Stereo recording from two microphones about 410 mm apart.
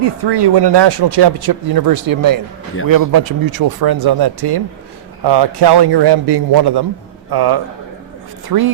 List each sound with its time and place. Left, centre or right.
0.0 s speech: right